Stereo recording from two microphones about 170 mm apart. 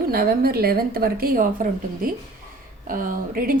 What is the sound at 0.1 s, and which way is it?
A woman's voice, 65° right (ahead or behind).